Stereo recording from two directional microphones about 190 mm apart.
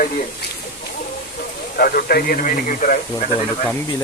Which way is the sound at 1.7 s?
50° left (ahead or behind).